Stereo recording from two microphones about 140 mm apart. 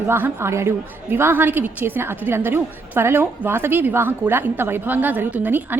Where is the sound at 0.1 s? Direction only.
15° right (ahead or behind).